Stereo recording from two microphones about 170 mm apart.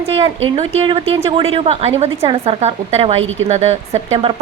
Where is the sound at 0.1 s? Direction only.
35° right (ahead or behind).